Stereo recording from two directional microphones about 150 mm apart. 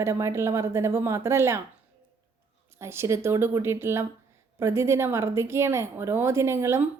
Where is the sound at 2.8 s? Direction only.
15° right (ahead or behind).